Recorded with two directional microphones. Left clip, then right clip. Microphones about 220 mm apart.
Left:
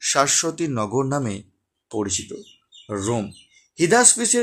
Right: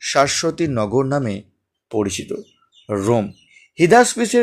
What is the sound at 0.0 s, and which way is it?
Speech, 5° right (ahead or behind).